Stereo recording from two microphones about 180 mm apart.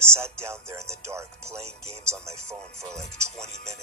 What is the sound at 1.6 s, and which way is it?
Speech, 35° right (ahead or behind).